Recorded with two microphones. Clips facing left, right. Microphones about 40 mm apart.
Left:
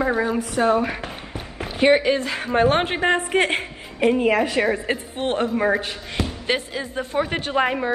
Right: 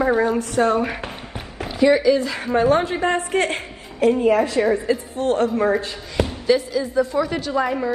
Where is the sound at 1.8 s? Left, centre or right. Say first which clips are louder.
Right 2 dB; left.